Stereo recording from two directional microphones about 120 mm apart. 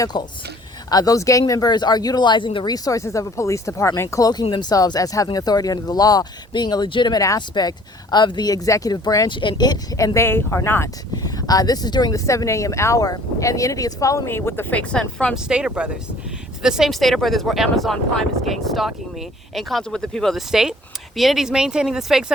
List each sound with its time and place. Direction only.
0.0 s speech: 35° left (ahead or behind)
11.2 s speech: 30° left (ahead or behind); by 15.4 s 10° left (ahead or behind)
15.4 s speech: 5° right (ahead or behind)